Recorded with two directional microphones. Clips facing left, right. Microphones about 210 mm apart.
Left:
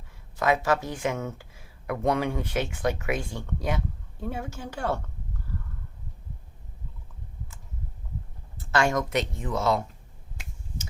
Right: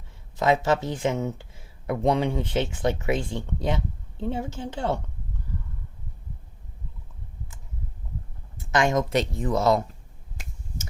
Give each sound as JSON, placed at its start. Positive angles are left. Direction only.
{"t": 0.3, "sound": "speech", "side_deg": -20}
{"t": 8.5, "sound": "speech", "side_deg": -20}